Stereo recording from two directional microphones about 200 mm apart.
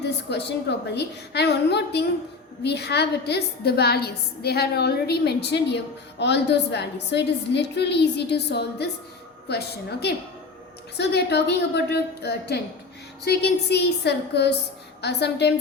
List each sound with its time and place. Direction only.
0.0 s a woman's voice: 55° left (ahead or behind)